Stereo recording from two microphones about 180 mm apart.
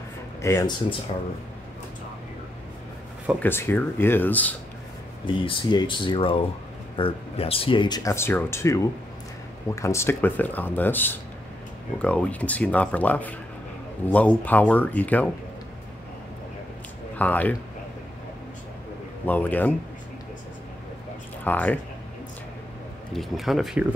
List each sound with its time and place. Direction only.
0.4 s speech: 20° left (ahead or behind)
3.3 s speech: 10° left (ahead or behind)
5.2 s speech: 30° left (ahead or behind); by 15.2 s 10° left (ahead or behind)
17.2 s speech: 10° left (ahead or behind)
19.2 s speech: 10° left (ahead or behind)
21.5 s speech: 10° left (ahead or behind)
23.1 s speech: centre (ahead or behind)